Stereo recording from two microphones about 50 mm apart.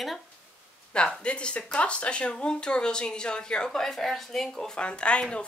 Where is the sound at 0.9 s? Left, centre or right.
Centre.